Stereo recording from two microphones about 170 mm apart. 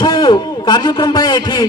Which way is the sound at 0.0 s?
25° left (ahead or behind).